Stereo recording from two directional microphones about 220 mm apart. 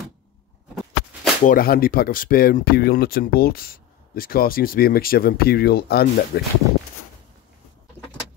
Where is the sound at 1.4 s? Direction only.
40° left (ahead or behind).